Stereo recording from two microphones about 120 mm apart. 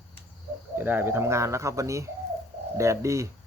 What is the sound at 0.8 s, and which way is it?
Speech, 15° right (ahead or behind).